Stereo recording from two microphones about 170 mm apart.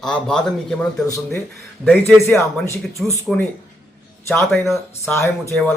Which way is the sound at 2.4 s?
15° left (ahead or behind).